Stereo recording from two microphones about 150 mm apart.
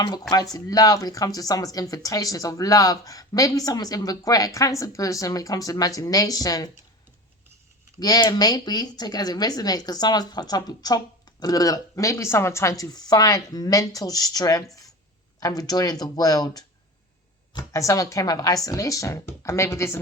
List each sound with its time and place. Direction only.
0.0 s speech: 25° left (ahead or behind)
7.9 s speech: 25° left (ahead or behind)